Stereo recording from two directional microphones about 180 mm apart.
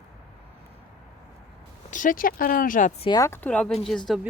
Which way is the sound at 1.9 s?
45° left (ahead or behind).